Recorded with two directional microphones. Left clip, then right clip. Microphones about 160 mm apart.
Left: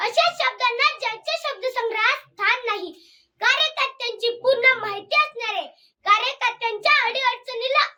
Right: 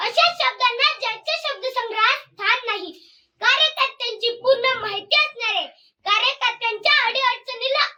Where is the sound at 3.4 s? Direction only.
30° left (ahead or behind).